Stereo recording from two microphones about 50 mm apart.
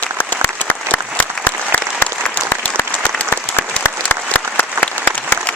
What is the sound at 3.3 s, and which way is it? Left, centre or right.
Applause, left.